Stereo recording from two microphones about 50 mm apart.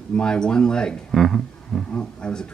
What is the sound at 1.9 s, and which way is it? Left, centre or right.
Speech, left.